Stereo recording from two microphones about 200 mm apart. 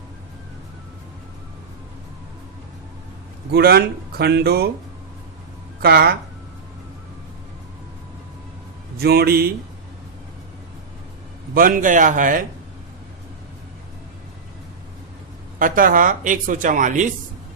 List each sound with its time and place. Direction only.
3.5 s speech: 50° right (ahead or behind)
5.8 s speech: 50° right (ahead or behind)
9.0 s speech: 50° right (ahead or behind)
11.5 s speech: 45° right (ahead or behind)
15.5 s speech: 45° right (ahead or behind)